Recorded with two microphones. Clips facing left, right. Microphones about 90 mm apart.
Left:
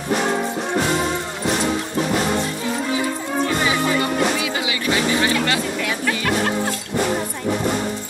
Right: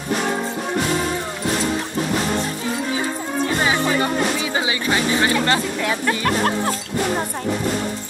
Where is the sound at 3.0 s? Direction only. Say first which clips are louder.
Left 1 dB; 35° right (ahead or behind).